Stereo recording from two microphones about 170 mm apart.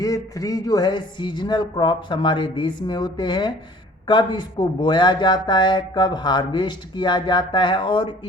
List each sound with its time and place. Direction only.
0.0 s speech: 20° left (ahead or behind)